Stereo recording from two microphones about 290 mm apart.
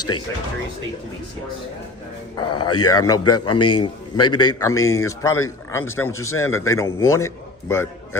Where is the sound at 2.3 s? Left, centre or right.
Centre.